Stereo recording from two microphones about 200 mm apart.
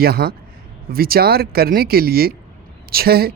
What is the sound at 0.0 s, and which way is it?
Speech, 50° right (ahead or behind).